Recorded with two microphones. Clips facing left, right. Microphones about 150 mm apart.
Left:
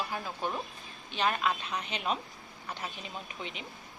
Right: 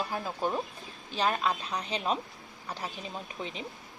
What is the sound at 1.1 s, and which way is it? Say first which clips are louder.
Speech: right 1 dB; 35° right (ahead or behind).